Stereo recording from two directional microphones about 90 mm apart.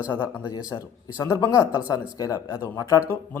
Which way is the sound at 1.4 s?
35° left (ahead or behind).